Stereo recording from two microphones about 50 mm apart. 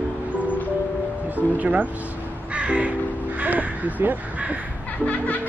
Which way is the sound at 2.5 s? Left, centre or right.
Right.